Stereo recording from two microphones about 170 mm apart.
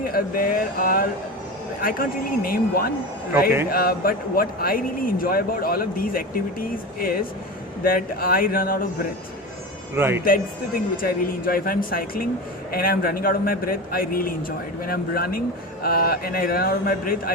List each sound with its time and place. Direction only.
0.0 s a man's voice: 60° left (ahead or behind)
9.9 s a man's voice: 15° right (ahead or behind)
10.9 s a man's voice: 55° left (ahead or behind)